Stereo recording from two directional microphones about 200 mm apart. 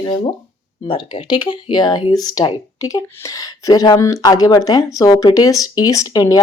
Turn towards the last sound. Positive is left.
turn(degrees=15)  # may be behind; listen again after turning